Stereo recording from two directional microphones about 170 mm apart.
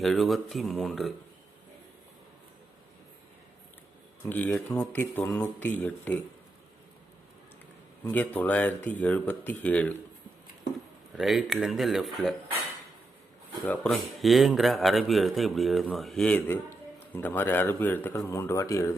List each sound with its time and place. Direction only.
0.0 s speech: centre (ahead or behind)
4.2 s speech: 15° left (ahead or behind)
8.0 s speech: 10° left (ahead or behind)
11.2 s speech: centre (ahead or behind)
13.6 s speech: 5° left (ahead or behind)